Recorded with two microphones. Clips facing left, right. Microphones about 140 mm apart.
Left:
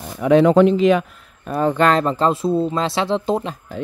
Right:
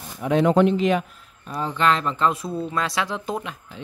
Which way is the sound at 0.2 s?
90° left.